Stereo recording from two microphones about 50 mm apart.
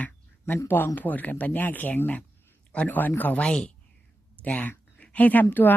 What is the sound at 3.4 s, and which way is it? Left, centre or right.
Speech, centre.